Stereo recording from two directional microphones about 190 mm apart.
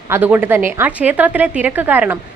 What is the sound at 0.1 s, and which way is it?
A woman's voice, 10° right (ahead or behind).